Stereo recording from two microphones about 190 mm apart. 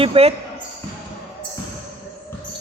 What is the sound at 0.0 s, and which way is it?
Speech, 30° right (ahead or behind).